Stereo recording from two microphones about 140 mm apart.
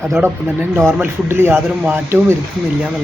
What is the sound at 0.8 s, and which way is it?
Speech, 15° right (ahead or behind).